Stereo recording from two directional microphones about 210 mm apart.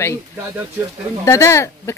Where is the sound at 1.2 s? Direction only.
15° left (ahead or behind).